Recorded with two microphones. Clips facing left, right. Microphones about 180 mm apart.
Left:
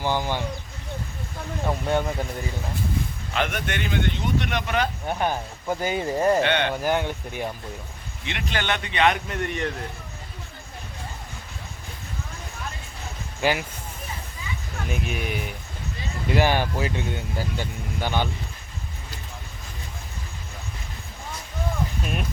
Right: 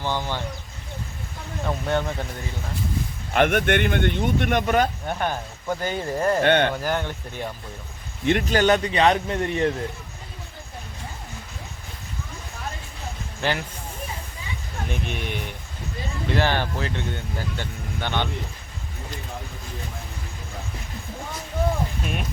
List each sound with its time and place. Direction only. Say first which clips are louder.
0.0 s speech: left 2 dB; 10° left (ahead or behind)
1.9 s speech: even; 10° left (ahead or behind)
3.3 s speech: right 8 dB; 55° right (ahead or behind)
5.0 s speech: left 1 dB; 10° left (ahead or behind)
6.4 s speech: right 4 dB; 50° right (ahead or behind)
6.8 s speech: left 2 dB; 15° left (ahead or behind)
8.2 s a man's voice: right 10 dB; 45° right (ahead or behind)
13.4 s speech: left 2 dB; 10° left (ahead or behind)
14.8 s speech: left 1 dB; 5° left (ahead or behind)
22.0 s speech: even; centre (ahead or behind)